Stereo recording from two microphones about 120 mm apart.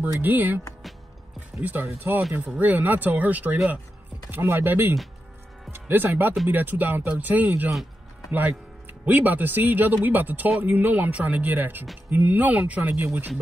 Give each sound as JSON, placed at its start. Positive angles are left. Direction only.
{"t": 0.2, "sound": "speech", "side_deg": -15}
{"t": 1.6, "sound": "speech", "side_deg": -15}
{"t": 2.4, "sound": "speech", "side_deg": -10}